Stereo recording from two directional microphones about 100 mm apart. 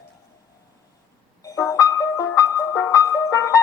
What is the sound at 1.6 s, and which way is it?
Music, 35° left (ahead or behind).